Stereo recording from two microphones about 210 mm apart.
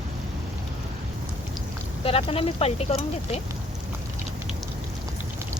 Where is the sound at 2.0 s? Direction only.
25° left (ahead or behind).